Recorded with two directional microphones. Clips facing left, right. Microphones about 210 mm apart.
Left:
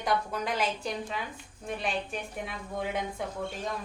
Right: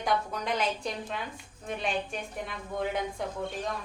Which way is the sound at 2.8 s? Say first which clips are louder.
Right 2 dB; centre (ahead or behind).